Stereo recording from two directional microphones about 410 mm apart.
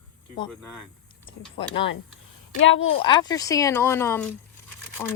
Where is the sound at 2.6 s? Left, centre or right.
Left.